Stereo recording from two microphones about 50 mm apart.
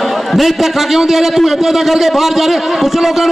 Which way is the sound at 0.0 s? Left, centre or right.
Centre.